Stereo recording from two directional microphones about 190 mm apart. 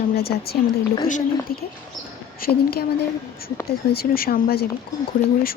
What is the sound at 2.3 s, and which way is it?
Speech, 55° left (ahead or behind).